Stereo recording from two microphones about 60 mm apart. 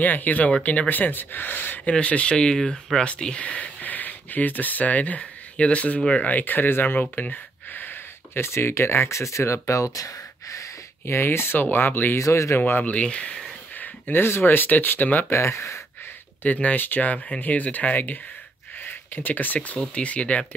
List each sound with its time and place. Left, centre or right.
0.0 s speech: left
1.9 s speech: centre
8.5 s speech: left
9.9 s a sound: left
11.1 s speech: left
12.2 s speech: left
12.5 s speech: left
12.9 s speech: left
13.7 s speech: left
15.3 s speech: left
16.4 s speech: left